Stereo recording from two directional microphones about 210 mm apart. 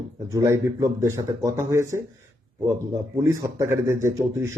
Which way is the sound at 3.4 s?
15° right (ahead or behind).